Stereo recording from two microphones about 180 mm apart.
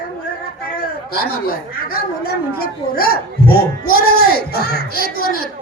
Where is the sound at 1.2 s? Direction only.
60° left (ahead or behind).